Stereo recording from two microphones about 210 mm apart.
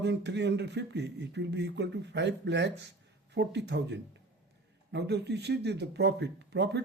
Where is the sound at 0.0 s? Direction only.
55° right (ahead or behind).